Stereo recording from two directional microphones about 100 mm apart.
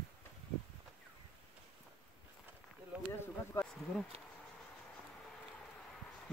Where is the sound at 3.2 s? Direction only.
25° left (ahead or behind).